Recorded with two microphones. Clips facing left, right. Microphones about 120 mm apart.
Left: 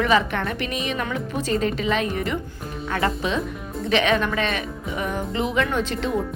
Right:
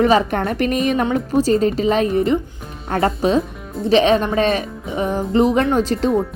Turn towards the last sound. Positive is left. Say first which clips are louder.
# right 7 dB
turn(degrees=-40)  # may be behind; listen again after turning